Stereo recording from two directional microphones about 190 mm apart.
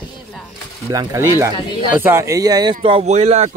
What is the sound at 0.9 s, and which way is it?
Speech, 15° right (ahead or behind).